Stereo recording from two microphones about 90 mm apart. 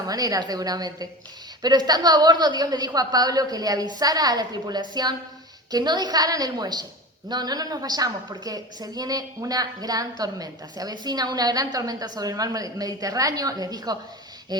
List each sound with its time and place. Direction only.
0.1 s a woman's voice: 45° right (ahead or behind)